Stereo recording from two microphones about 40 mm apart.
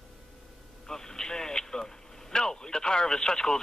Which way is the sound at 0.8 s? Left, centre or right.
Centre.